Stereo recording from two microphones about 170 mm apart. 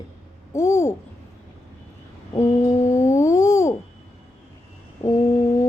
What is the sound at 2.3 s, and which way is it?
Humming, 15° left (ahead or behind).